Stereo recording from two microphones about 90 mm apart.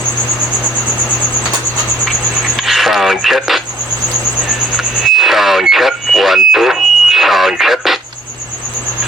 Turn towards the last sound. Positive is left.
turn(degrees=0)  # may be behind; listen again after turning